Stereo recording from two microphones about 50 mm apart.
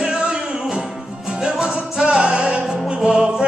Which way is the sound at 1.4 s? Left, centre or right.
Centre.